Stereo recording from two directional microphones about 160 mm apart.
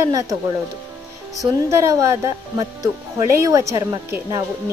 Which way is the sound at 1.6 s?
20° right (ahead or behind).